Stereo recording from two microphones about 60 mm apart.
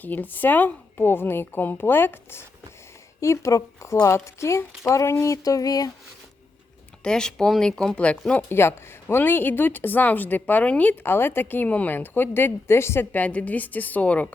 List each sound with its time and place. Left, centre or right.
0.0 s speech: left
3.2 s speech: left
5.2 s a sound: left
7.0 s a woman's voice: centre
8.4 s speech: left
11.0 s speech: left
13.1 s a woman's voice: left